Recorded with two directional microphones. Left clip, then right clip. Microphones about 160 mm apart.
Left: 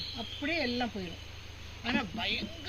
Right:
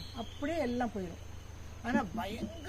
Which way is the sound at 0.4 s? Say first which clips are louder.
Left 2 dB; 10° left (ahead or behind).